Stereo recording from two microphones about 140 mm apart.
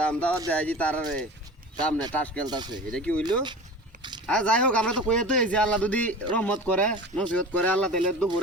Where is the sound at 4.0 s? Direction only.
30° right (ahead or behind).